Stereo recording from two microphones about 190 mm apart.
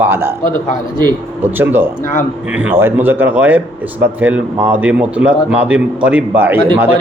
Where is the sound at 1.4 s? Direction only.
10° right (ahead or behind).